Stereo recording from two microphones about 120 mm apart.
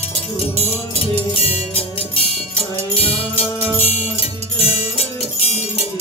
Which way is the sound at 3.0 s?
55° left (ahead or behind).